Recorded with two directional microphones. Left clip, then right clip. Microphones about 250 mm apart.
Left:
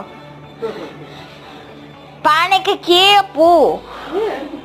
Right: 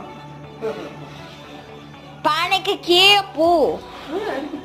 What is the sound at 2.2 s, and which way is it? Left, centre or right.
A woman's voice, centre.